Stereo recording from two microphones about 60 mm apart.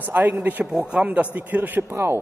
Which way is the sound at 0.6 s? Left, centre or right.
Centre.